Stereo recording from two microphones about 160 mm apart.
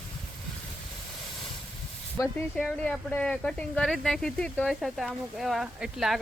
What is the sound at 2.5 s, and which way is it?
Speech, 5° left (ahead or behind).